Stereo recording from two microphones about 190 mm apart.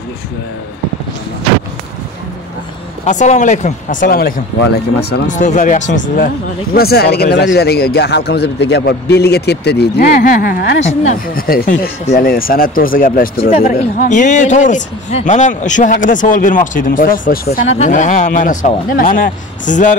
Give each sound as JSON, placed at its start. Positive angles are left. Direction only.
{"t": 3.1, "sound": "speech", "side_deg": 40}
{"t": 4.6, "sound": "speech", "side_deg": 60}
{"t": 5.3, "sound": "speech", "side_deg": 40}
{"t": 10.9, "sound": "speech", "side_deg": 45}